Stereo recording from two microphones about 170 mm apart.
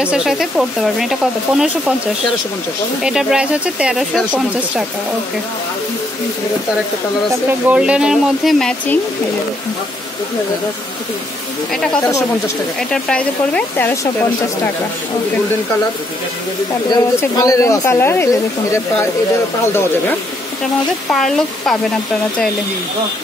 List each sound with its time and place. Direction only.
0.0 s speech: 5° right (ahead or behind)
3.0 s speech: 5° right (ahead or behind)
7.7 s speech: 5° right (ahead or behind)
11.7 s speech: 5° left (ahead or behind)
16.9 s speech: 20° left (ahead or behind)
21.1 s speech: centre (ahead or behind)